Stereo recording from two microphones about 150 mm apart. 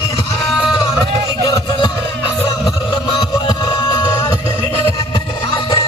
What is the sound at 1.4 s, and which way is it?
Music, 25° left (ahead or behind).